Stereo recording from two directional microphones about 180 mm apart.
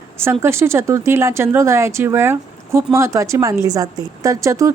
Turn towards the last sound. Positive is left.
turn(degrees=-15)  # may be behind; listen again after turning